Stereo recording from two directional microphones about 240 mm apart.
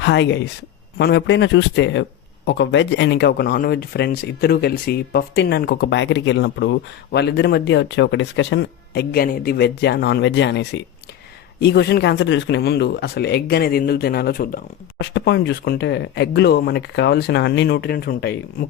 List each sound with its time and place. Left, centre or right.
0.0 s speech: left